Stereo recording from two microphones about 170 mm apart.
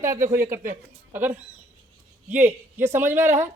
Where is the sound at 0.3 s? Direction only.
15° right (ahead or behind).